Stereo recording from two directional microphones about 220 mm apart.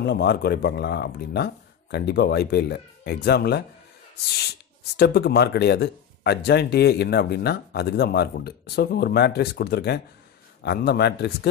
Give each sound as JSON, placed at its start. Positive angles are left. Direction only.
{"t": 0.0, "sound": "speech", "side_deg": 50}